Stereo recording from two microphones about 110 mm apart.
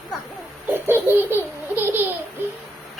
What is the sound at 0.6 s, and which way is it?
Baby laughter, 20° right (ahead or behind).